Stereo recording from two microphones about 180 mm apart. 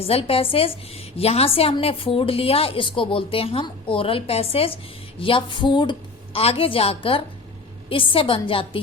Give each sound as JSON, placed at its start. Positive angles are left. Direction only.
{"t": 0.0, "sound": "a woman's voice", "side_deg": 35}